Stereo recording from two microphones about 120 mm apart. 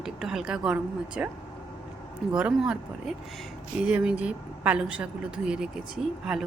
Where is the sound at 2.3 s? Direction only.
5° right (ahead or behind).